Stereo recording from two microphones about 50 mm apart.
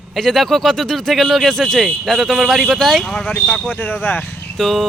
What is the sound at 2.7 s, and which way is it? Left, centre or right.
Speech, centre.